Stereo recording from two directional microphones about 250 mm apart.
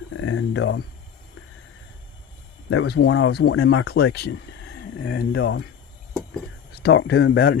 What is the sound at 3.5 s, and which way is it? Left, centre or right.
Speech, left.